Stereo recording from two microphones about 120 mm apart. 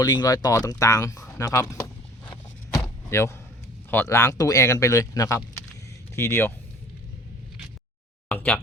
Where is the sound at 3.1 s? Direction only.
25° left (ahead or behind).